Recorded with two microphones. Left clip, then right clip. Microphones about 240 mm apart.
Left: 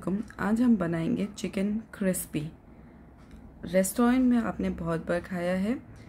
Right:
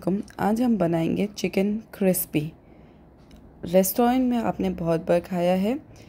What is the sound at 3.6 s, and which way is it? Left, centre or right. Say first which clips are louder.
A woman's voice: right 5 dB; centre.